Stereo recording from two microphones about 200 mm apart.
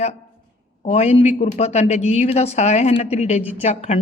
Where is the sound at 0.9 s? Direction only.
30° left (ahead or behind).